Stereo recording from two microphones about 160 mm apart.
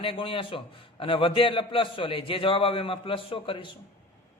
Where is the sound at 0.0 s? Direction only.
35° left (ahead or behind).